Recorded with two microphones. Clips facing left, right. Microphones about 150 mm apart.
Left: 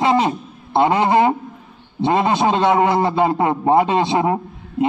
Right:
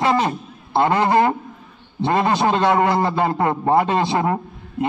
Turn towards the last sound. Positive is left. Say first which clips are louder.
# left 4 dB
turn(degrees=15)  # may be behind; listen again after turning